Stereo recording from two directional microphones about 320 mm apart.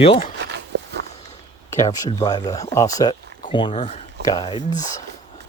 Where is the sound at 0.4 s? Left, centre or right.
Right.